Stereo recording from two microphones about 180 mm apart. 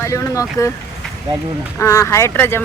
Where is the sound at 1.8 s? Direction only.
15° left (ahead or behind).